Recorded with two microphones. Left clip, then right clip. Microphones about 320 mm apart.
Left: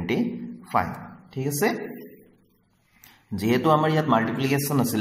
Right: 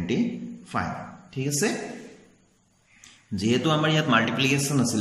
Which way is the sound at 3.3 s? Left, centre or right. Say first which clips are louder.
Left 3 dB; left.